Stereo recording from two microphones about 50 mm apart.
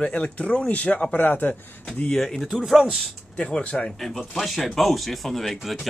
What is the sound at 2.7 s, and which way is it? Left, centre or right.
Speech, centre.